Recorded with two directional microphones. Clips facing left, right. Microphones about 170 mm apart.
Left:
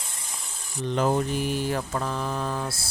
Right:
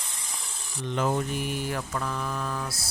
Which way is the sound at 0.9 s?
35° left (ahead or behind).